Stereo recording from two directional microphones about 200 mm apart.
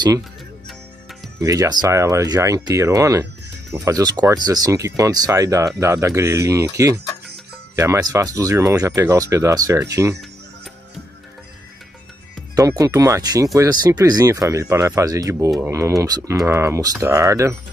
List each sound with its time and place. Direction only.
1.4 s speech: 15° right (ahead or behind)
12.5 s speech: 15° right (ahead or behind)